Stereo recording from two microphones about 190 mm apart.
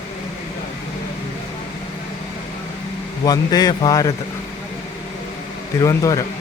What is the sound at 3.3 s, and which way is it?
Speech, 20° left (ahead or behind).